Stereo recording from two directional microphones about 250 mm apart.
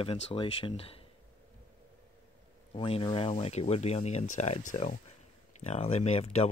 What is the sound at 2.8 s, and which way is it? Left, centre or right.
Speech, left.